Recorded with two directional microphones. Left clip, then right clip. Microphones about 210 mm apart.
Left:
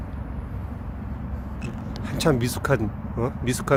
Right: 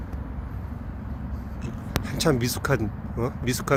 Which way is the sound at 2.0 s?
Centre (ahead or behind).